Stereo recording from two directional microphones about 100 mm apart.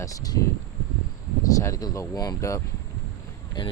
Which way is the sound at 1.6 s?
35° left (ahead or behind).